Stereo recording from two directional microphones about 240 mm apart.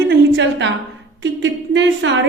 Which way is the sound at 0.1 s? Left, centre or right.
Right.